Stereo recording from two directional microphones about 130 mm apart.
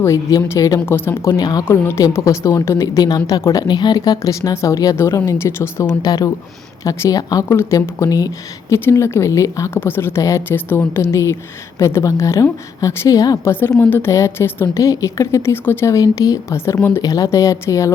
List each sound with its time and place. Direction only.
0.0 s speech: 25° left (ahead or behind)
1.3 s a woman's voice: 30° left (ahead or behind)
1.6 s speech: 20° left (ahead or behind)
5.8 s speech: 30° left (ahead or behind)
7.4 s speech: 15° left (ahead or behind)
13.5 s speech: 15° left (ahead or behind)